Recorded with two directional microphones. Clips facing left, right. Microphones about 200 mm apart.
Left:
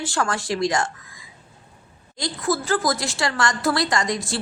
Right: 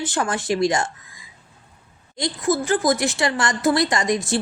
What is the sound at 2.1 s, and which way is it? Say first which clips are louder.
A woman's voice: right 3 dB; 20° right (ahead or behind).